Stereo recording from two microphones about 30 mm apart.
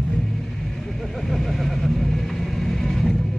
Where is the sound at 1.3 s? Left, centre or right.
Centre.